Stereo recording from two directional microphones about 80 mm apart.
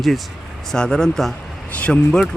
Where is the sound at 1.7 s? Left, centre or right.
Centre.